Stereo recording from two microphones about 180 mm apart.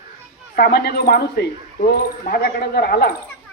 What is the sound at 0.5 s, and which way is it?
Speech, 60° left (ahead or behind).